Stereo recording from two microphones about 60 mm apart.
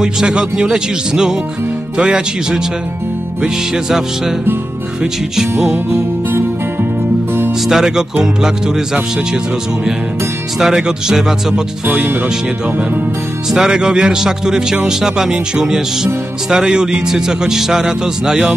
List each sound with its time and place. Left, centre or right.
0.0 s speech: centre
5.0 s speech: centre
7.6 s speech: centre
10.6 s speech: centre
11.9 s speech: right
13.5 s speech: centre